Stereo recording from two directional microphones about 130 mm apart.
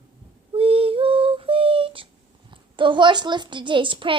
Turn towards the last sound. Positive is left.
turn(degrees=-40)  # may be behind; listen again after turning